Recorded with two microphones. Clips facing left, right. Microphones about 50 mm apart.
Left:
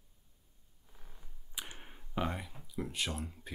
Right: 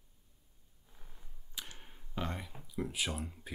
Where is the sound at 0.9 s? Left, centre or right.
Centre.